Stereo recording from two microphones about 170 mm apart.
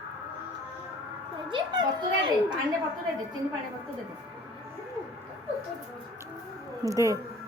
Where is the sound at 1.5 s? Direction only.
30° right (ahead or behind).